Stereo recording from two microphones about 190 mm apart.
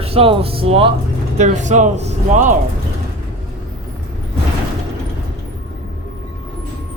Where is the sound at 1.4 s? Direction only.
40° right (ahead or behind).